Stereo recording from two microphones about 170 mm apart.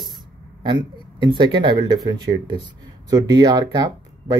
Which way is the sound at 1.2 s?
25° right (ahead or behind).